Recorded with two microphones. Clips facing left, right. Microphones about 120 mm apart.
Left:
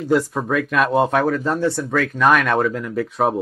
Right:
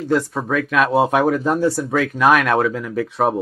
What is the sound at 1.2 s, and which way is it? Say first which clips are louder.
Speech: right 2 dB; 15° right (ahead or behind).